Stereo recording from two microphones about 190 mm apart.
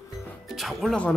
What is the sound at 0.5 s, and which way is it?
Speech, centre (ahead or behind).